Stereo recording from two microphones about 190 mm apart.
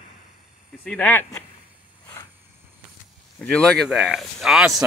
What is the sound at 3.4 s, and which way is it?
Speech, 5° left (ahead or behind).